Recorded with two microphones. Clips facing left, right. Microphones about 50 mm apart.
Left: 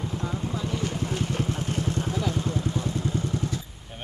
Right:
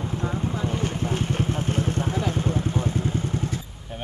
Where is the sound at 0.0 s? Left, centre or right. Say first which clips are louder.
Right 3 dB; right.